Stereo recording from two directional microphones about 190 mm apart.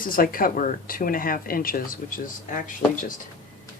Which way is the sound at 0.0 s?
50° left (ahead or behind).